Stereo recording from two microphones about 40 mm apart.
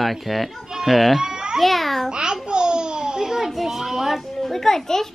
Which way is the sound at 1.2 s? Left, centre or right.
Centre.